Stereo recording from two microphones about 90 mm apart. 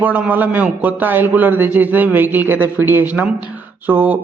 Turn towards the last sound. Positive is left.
turn(degrees=-20)  # may be behind; listen again after turning